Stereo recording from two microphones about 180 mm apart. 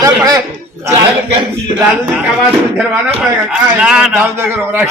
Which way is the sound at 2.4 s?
5° right (ahead or behind).